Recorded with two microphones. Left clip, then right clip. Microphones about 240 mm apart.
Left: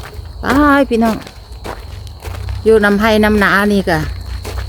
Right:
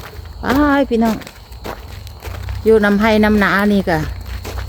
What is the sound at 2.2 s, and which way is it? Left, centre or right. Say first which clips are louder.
Speech: left 2 dB; centre.